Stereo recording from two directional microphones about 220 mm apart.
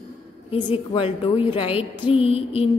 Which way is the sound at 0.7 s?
25° left (ahead or behind).